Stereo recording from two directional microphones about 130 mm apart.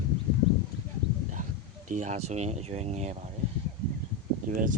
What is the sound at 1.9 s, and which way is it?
Speech, 65° right (ahead or behind).